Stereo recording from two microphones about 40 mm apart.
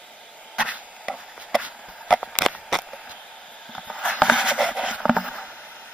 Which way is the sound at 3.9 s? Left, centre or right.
Left.